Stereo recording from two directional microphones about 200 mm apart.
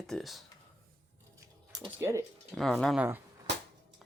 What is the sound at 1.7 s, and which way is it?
Speech, 15° right (ahead or behind).